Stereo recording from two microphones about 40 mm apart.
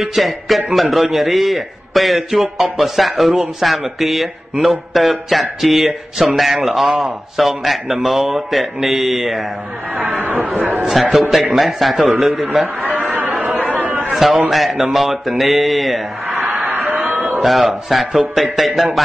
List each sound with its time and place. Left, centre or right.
0.0 s speech: centre
10.4 s a man's voice: right
11.1 s a man's voice: centre
11.3 s a man's voice: centre
13.0 s chatter: right
14.1 s a man's voice: centre
17.4 s speech: centre